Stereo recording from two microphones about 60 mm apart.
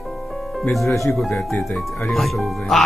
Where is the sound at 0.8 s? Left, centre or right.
Left.